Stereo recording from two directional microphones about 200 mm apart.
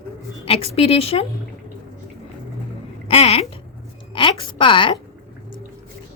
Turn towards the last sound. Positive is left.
turn(degrees=25)  # may be behind; listen again after turning